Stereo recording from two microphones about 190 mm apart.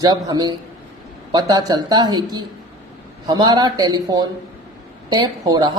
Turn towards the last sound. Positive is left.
turn(degrees=-20)  # may be behind; listen again after turning